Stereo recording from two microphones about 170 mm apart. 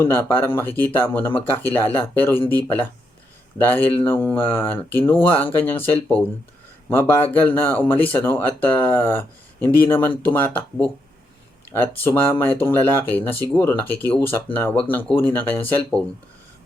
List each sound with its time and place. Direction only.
0.0 s speech: 15° left (ahead or behind)